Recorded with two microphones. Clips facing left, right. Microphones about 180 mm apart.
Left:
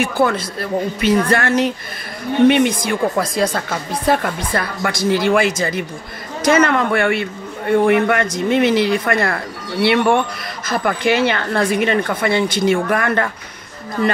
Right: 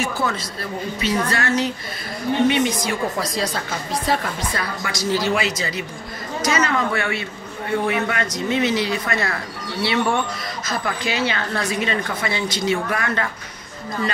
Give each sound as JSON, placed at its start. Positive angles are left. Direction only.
{"t": 0.0, "sound": "a woman's voice", "side_deg": 55}